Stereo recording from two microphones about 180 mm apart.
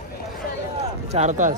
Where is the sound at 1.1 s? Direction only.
40° right (ahead or behind).